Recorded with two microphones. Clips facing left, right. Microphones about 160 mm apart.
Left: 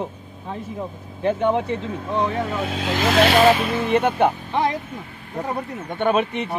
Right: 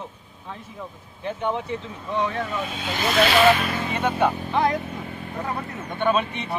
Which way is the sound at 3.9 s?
60° left (ahead or behind).